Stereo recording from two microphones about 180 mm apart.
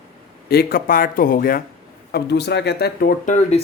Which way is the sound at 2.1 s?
65° left (ahead or behind).